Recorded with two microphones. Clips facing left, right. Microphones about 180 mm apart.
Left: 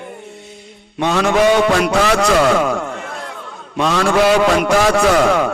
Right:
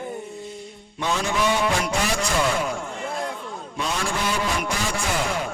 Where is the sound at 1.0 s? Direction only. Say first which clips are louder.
Left 10 dB; 70° left (ahead or behind).